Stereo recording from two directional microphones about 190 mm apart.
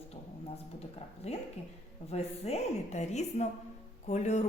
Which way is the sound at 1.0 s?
35° left (ahead or behind).